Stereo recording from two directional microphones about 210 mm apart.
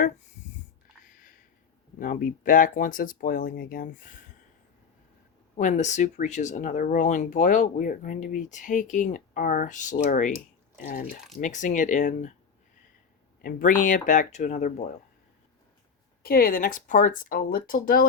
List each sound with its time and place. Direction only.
1.0 s a sound: 40° left (ahead or behind)
2.0 s speech: 40° left (ahead or behind)
5.5 s speech: 35° left (ahead or behind)
13.4 s speech: 40° left (ahead or behind)
16.2 s speech: 45° left (ahead or behind)